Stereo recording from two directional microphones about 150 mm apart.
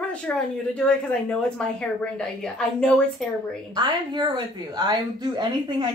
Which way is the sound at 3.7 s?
30° right (ahead or behind).